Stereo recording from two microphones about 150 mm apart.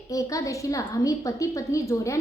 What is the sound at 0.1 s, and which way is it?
A woman's voice, 20° left (ahead or behind).